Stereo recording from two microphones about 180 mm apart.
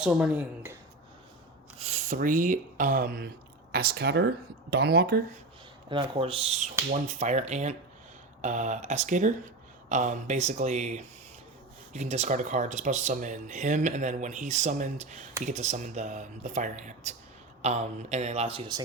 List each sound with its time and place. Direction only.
0.0 s speech: 10° right (ahead or behind)
1.8 s speech: 45° right (ahead or behind); by 5.2 s 60° right (ahead or behind)
5.9 s speech: 30° right (ahead or behind)